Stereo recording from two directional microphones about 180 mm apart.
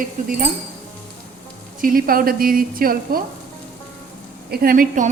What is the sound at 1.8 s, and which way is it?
A woman's voice, 50° right (ahead or behind).